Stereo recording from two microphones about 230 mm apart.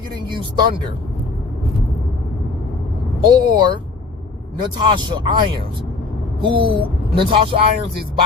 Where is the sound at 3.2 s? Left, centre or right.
Centre.